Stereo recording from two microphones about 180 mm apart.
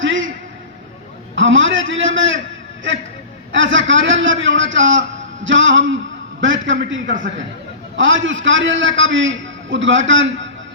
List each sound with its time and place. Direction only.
0.0 s a sound: 90° right
1.4 s a man's voice: 90° right
3.5 s a man's voice: 90° right